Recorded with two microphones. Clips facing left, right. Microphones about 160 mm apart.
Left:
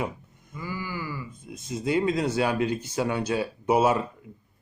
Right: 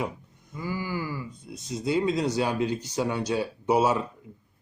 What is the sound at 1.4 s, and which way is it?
Speech, 10° left (ahead or behind).